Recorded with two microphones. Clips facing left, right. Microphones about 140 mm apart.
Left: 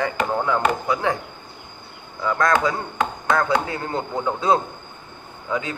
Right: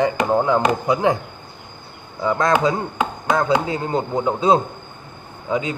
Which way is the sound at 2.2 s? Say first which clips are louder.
Right 2 dB; 20° right (ahead or behind).